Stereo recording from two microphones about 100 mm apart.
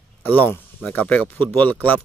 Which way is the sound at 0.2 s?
20° left (ahead or behind).